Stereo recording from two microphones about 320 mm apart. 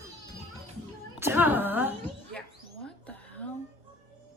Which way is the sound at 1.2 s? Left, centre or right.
Centre.